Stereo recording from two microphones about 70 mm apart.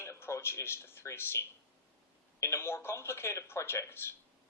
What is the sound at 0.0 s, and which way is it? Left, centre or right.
A man's voice, left.